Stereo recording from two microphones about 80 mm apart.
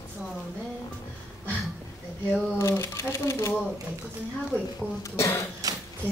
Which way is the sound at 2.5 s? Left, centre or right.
Left.